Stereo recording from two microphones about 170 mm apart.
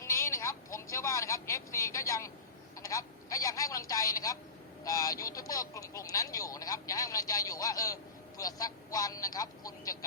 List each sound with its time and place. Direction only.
0.0 s speech: 15° left (ahead or behind)